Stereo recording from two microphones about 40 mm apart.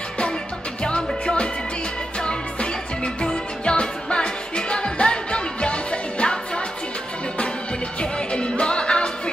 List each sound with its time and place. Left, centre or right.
0.8 s music: left
8.0 s music: left